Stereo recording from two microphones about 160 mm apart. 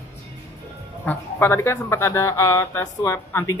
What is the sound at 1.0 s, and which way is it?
Speech, 10° left (ahead or behind).